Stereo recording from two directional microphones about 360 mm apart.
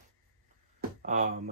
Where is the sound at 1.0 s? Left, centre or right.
Right.